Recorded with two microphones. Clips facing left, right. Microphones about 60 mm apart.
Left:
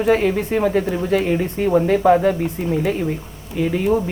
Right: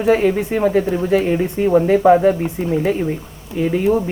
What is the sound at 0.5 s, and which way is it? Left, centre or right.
Speech, centre.